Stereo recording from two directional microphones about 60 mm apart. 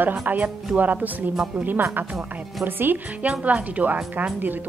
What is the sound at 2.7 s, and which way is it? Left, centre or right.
Speech, right.